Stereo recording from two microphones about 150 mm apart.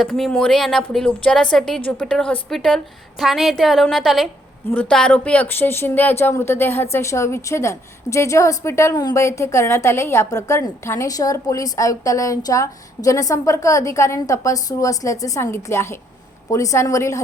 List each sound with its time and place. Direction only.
0.0 s a woman's voice: centre (ahead or behind); by 17.2 s 20° left (ahead or behind)